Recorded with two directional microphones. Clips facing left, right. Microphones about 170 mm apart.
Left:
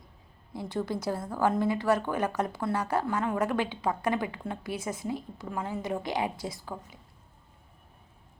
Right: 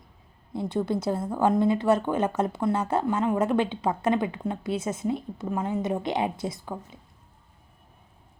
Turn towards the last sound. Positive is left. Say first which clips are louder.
# right 4 dB
turn(degrees=-20)  # may be behind; listen again after turning